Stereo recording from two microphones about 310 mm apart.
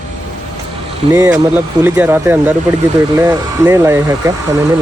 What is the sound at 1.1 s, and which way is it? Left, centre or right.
Speech, centre.